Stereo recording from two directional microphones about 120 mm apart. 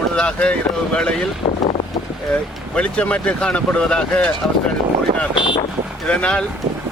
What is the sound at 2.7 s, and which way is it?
Speech, 10° left (ahead or behind).